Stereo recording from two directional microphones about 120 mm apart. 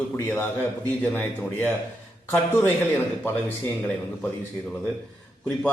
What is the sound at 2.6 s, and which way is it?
Speech, 15° left (ahead or behind).